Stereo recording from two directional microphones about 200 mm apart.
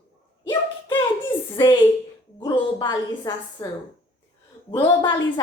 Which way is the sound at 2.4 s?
20° left (ahead or behind).